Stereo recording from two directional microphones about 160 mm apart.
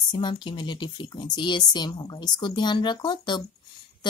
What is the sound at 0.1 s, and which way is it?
A woman's voice, 30° left (ahead or behind).